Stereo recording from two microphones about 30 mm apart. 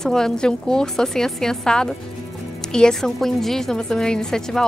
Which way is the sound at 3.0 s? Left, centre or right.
Centre.